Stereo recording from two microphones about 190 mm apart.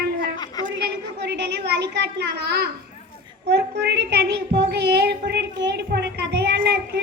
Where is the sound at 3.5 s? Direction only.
60° right (ahead or behind).